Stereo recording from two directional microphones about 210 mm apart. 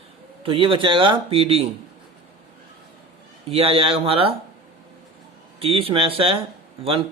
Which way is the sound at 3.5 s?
30° right (ahead or behind).